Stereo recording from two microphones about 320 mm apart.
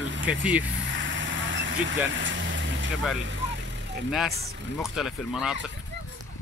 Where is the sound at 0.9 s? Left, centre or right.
Right.